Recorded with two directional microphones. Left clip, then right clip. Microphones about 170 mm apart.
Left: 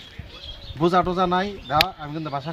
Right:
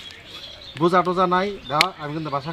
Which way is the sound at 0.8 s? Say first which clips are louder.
Right 2 dB; 35° left (ahead or behind).